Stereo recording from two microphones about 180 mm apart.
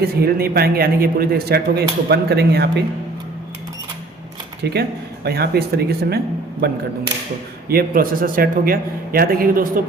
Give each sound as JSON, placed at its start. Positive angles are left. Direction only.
{"t": 0.0, "sound": "a man's voice", "side_deg": -55}
{"t": 4.7, "sound": "a man's voice", "side_deg": -65}
{"t": 7.7, "sound": "a man's voice", "side_deg": -55}